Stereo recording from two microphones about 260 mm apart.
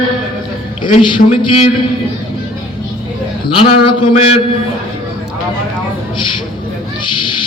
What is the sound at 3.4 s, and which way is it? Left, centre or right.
Speech, centre.